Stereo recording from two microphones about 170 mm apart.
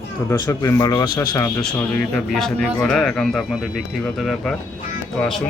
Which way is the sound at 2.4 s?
5° left (ahead or behind).